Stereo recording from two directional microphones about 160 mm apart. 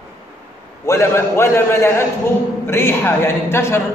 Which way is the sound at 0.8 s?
15° left (ahead or behind).